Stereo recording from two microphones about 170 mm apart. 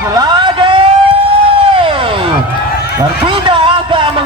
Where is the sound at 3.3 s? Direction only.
30° right (ahead or behind).